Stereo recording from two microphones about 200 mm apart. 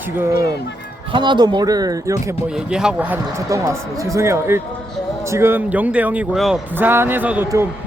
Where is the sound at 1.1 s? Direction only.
20° right (ahead or behind).